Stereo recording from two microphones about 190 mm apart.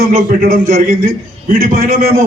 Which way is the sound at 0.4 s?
50° right (ahead or behind).